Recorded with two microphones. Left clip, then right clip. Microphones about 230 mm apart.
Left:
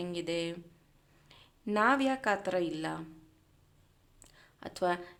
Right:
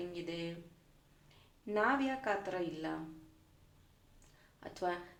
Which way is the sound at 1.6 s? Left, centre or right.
Left.